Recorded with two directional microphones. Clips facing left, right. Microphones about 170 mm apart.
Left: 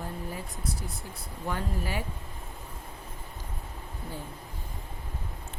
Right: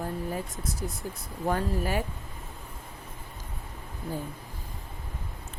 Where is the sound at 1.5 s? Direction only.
45° right (ahead or behind).